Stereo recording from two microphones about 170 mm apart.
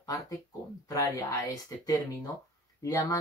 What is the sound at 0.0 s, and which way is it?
Speech, 20° left (ahead or behind).